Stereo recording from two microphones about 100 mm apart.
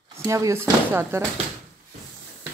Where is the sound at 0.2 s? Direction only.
30° right (ahead or behind).